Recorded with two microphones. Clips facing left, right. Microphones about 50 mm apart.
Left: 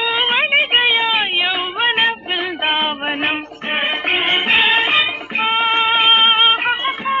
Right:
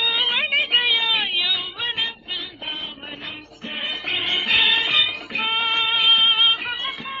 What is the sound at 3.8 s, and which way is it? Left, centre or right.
Music, left.